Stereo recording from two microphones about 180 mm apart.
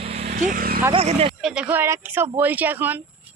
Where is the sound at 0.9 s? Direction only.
35° right (ahead or behind).